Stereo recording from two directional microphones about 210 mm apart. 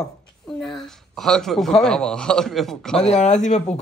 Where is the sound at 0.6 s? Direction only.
Centre (ahead or behind).